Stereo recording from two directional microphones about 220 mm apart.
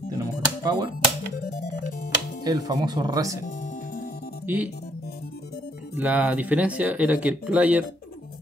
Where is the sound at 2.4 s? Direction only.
15° right (ahead or behind).